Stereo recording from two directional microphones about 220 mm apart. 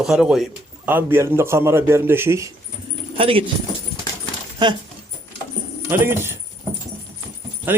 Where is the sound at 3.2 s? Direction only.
25° right (ahead or behind).